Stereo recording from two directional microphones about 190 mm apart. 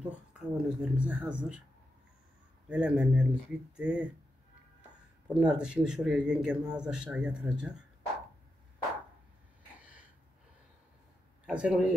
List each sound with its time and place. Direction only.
0.0 s speech: 5° right (ahead or behind)
2.7 s speech: 5° right (ahead or behind)
5.3 s speech: 5° right (ahead or behind)
9.8 s gasp: 5° right (ahead or behind)
11.4 s speech: 5° right (ahead or behind)